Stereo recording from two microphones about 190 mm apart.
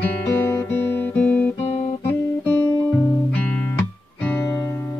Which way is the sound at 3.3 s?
10° left (ahead or behind).